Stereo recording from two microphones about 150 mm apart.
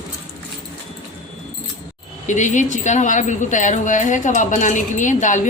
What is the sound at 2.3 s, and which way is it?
A woman's voice, 55° left (ahead or behind).